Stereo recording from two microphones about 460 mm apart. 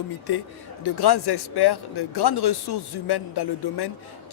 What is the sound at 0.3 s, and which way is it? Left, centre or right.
Speech, left.